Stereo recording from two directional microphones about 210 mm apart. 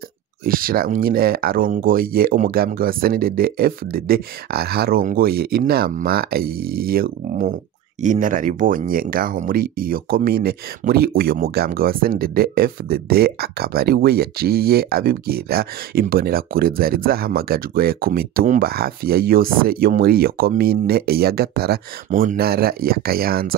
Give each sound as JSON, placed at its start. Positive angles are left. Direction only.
{"t": 0.5, "sound": "speech", "side_deg": -45}